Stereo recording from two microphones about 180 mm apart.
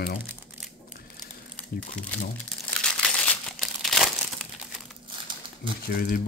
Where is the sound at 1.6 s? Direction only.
5° left (ahead or behind).